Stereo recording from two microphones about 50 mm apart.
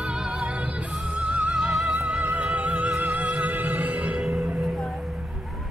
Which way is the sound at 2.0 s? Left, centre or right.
Right.